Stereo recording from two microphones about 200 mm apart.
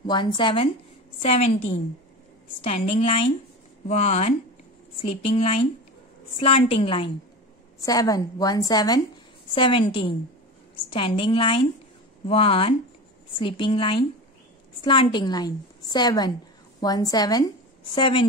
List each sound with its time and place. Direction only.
0.0 s a woman's voice: 20° left (ahead or behind)
7.8 s a woman's voice: 15° left (ahead or behind)